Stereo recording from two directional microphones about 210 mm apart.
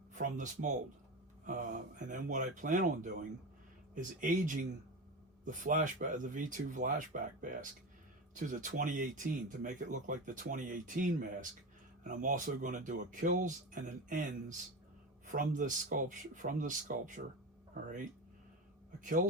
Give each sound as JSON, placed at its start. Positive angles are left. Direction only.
{"t": 0.1, "sound": "a man's voice", "side_deg": -35}